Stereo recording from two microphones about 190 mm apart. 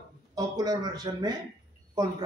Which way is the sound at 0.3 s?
20° right (ahead or behind).